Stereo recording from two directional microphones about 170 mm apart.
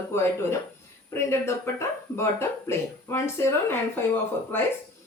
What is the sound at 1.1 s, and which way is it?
Speech, 15° left (ahead or behind).